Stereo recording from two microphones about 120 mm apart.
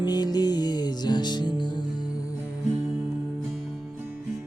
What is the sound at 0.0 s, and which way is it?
Music, 35° left (ahead or behind).